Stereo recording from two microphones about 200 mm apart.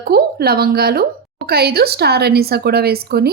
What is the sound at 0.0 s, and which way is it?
A woman's voice, 50° right (ahead or behind).